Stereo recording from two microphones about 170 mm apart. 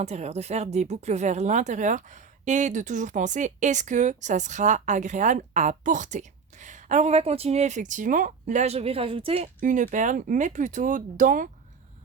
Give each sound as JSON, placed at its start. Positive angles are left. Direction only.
{"t": 0.0, "sound": "speech", "side_deg": -40}
{"t": 9.6, "sound": "speech", "side_deg": -50}